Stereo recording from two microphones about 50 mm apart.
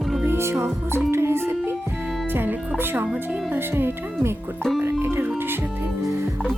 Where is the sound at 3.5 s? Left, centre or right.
Right.